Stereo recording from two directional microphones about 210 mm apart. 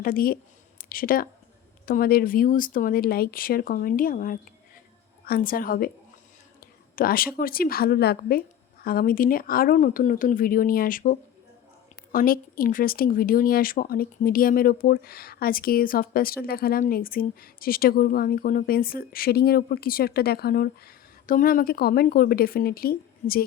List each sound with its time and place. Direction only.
0.0 s speech: 45° left (ahead or behind)
6.9 s speech: 45° left (ahead or behind)